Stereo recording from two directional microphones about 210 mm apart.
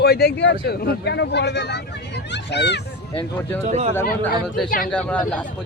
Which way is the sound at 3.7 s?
30° right (ahead or behind).